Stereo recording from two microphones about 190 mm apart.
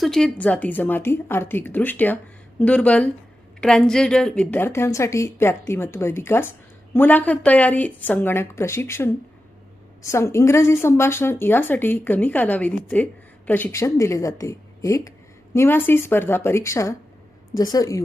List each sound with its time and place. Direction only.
0.0 s a woman's voice: 5° left (ahead or behind)